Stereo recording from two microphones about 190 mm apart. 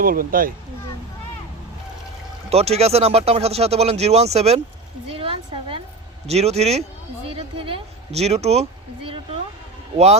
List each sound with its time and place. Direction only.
0.0 s speech: 50° right (ahead or behind)
2.5 s speech: 35° right (ahead or behind)